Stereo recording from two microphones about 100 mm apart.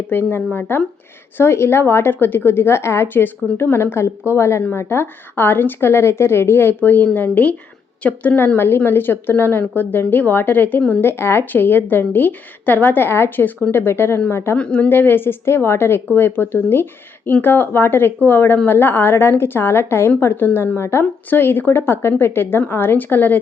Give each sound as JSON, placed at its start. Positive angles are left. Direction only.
{"t": 0.1, "sound": "a woman's voice", "side_deg": 20}
{"t": 11.1, "sound": "a woman's voice", "side_deg": 25}
{"t": 14.6, "sound": "a woman's voice", "side_deg": 10}